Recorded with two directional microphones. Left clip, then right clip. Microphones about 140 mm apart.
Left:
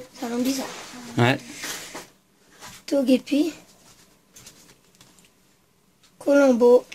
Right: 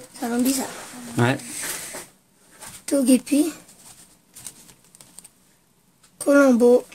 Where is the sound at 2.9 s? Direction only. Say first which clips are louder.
Right 1 dB; 40° right (ahead or behind).